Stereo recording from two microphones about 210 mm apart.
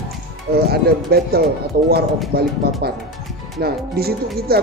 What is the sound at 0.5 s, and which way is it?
Speech, 50° right (ahead or behind).